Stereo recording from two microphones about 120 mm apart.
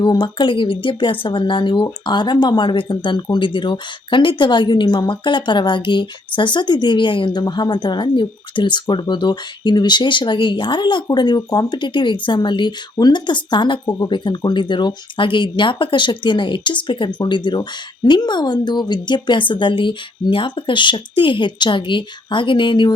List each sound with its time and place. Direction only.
0.0 s a woman's voice: 40° left (ahead or behind)